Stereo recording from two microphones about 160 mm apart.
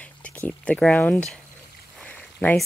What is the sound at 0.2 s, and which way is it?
Speech, 10° left (ahead or behind).